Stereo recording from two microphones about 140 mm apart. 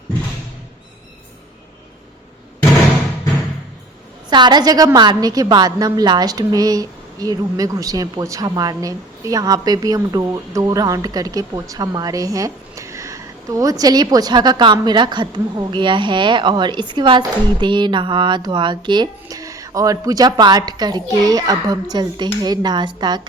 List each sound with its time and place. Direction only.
4.3 s a woman's voice: 30° right (ahead or behind)